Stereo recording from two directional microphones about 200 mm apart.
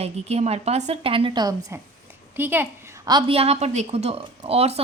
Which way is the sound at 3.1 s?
25° right (ahead or behind).